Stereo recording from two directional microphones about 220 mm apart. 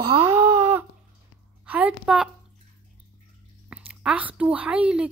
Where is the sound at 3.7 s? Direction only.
5° right (ahead or behind).